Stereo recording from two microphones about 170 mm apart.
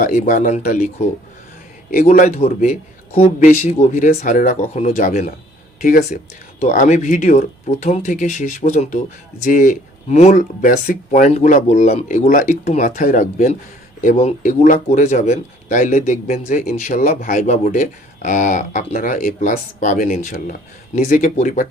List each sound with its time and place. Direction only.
0.0 s speech: 50° left (ahead or behind)